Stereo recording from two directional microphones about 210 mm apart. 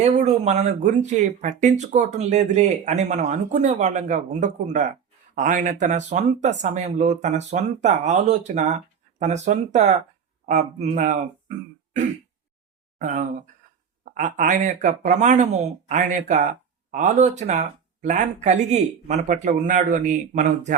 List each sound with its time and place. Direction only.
0.0 s speech: 35° right (ahead or behind)
13.0 s speech: 35° right (ahead or behind)